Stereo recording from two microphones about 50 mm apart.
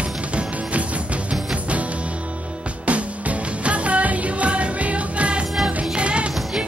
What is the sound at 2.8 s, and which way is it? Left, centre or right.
Music, right.